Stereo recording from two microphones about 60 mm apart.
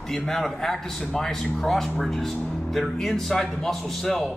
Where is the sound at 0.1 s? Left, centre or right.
Centre.